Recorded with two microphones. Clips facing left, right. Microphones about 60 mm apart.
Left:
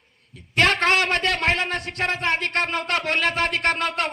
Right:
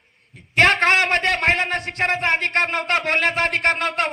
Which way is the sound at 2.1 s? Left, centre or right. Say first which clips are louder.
Right 3 dB; right.